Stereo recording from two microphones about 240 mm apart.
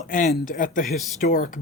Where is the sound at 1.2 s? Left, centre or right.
Left.